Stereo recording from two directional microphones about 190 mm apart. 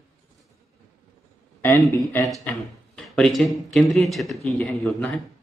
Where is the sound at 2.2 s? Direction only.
Centre (ahead or behind).